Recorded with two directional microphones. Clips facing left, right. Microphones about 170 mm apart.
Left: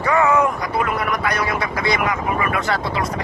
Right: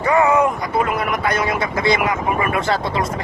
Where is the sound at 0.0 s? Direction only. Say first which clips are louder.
Right 2 dB; 20° right (ahead or behind).